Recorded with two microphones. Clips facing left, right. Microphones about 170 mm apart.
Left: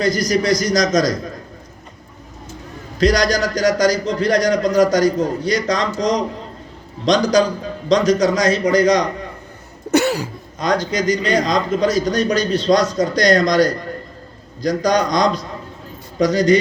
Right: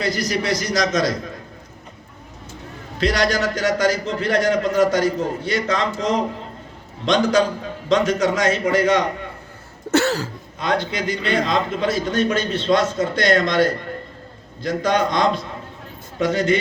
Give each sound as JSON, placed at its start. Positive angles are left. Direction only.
{"t": 0.0, "sound": "a man's voice", "side_deg": 40}
{"t": 3.0, "sound": "a man's voice", "side_deg": 40}
{"t": 9.9, "sound": "cough", "side_deg": 15}
{"t": 10.6, "sound": "a man's voice", "side_deg": 40}